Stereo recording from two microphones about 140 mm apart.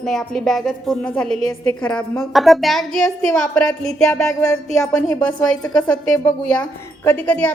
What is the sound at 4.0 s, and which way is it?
Music, 20° left (ahead or behind).